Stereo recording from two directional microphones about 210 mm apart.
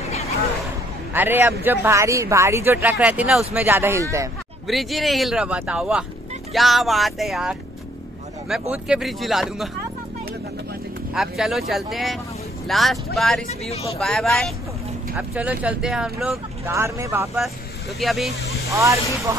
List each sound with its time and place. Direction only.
1.1 s speech: 10° right (ahead or behind)
4.6 s speech: centre (ahead or behind)
8.7 s speech: 5° right (ahead or behind)
11.1 s speech: centre (ahead or behind)
13.5 s speech: 30° left (ahead or behind)
13.9 s speech: 5° left (ahead or behind); by 17.3 s 15° right (ahead or behind)
17.9 s speech: centre (ahead or behind)
18.7 s speech: 15° right (ahead or behind)